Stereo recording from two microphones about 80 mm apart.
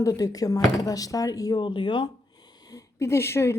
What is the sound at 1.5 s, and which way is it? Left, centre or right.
Speech, left.